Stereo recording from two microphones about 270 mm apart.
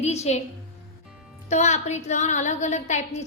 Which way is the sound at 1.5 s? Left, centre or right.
Left.